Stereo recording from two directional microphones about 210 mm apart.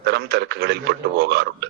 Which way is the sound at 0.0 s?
50° right (ahead or behind).